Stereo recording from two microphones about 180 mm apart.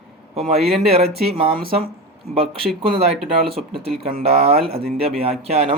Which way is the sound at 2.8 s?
30° right (ahead or behind).